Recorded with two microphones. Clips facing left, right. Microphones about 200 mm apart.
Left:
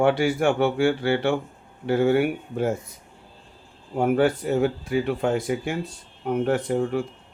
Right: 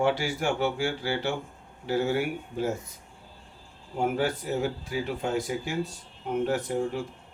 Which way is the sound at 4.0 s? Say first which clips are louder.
Left 7 dB; 60° left (ahead or behind).